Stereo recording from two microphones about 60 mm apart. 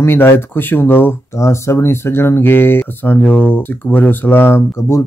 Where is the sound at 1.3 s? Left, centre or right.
Left.